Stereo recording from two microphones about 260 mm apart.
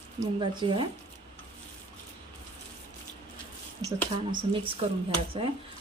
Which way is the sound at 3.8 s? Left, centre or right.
Centre.